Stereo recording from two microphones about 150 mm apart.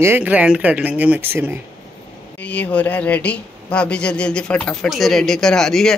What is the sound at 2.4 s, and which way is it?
Speech, 10° left (ahead or behind).